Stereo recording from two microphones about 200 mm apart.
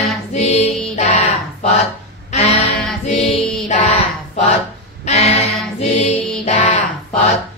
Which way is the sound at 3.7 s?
35° left (ahead or behind).